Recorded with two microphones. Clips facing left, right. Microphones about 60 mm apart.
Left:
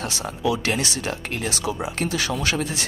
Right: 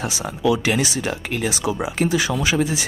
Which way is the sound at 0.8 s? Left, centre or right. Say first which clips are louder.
Right 4 dB; centre.